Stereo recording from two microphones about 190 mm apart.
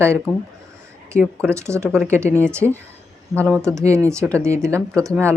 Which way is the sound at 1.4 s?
15° right (ahead or behind).